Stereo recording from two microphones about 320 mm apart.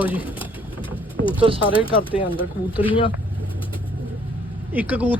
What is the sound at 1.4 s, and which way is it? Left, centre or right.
Speech, centre.